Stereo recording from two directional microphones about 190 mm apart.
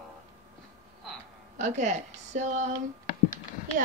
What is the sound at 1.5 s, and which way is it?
A woman's voice, 40° right (ahead or behind).